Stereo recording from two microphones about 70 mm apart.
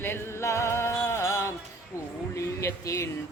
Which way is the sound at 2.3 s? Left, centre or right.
Left.